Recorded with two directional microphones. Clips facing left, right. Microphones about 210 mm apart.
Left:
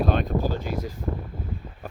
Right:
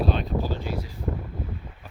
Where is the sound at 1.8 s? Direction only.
50° left (ahead or behind).